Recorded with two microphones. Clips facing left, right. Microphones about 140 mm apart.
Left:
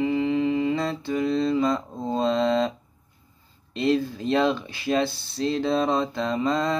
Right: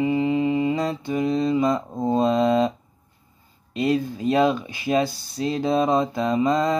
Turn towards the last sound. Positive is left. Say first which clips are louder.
# right 4 dB
turn(degrees=-15)  # may be behind; listen again after turning